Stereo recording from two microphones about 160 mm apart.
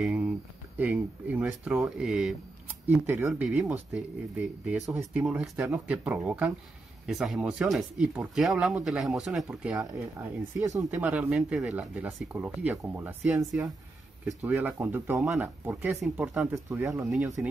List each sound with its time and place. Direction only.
0.0 s a sound: 5° right (ahead or behind)
0.7 s speech: 10° right (ahead or behind)
10.0 s speech: 20° right (ahead or behind)
11.0 s speech: 10° right (ahead or behind)
15.1 s speech: centre (ahead or behind)
16.0 s speech: centre (ahead or behind)
16.6 s speech: 15° right (ahead or behind)